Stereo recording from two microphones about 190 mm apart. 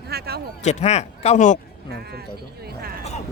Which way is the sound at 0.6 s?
35° left (ahead or behind).